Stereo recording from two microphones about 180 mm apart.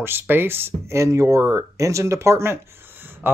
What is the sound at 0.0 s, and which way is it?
Speech, 10° right (ahead or behind).